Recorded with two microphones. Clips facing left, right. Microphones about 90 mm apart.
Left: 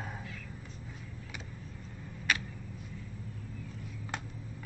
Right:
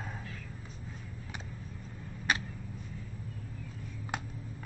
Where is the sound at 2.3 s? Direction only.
35° right (ahead or behind).